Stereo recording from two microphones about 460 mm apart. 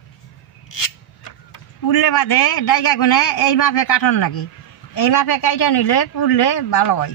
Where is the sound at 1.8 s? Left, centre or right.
Left.